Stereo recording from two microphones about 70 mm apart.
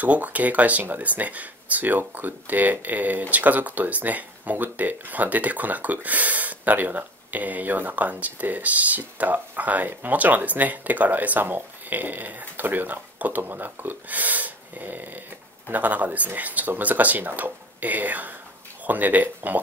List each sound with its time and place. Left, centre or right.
0.0 s speech: right